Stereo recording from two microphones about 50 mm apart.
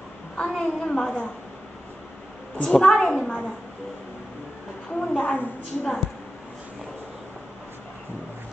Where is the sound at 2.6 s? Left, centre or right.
Centre.